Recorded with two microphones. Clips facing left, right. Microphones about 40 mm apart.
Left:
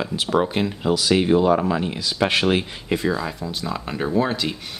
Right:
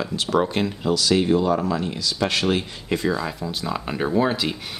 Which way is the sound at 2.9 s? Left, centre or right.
Centre.